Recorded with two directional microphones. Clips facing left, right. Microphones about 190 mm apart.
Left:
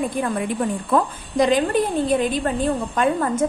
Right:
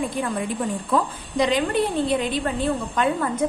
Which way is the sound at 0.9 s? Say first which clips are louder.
Left 3 dB; 45° left (ahead or behind).